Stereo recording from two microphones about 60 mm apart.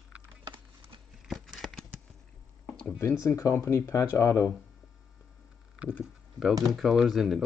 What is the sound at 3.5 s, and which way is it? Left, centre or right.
Speech, left.